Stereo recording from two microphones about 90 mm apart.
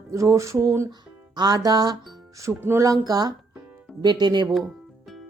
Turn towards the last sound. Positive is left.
turn(degrees=-50)  # may be behind; listen again after turning